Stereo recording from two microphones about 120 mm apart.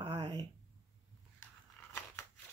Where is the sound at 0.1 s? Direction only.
30° right (ahead or behind).